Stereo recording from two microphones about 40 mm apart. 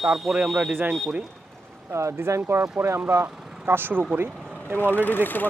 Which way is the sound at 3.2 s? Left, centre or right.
Right.